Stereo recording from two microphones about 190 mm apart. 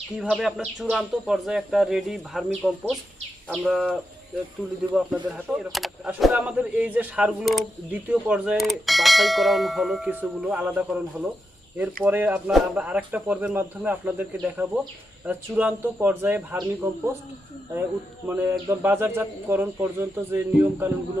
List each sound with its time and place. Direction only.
0.2 s speech: 5° right (ahead or behind)
18.3 s speech: 10° right (ahead or behind)